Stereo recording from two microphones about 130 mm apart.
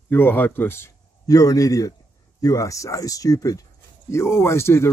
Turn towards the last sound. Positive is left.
turn(degrees=20)  # may be behind; listen again after turning